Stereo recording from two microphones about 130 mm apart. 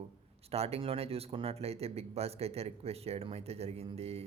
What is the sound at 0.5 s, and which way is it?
Speech, 55° right (ahead or behind).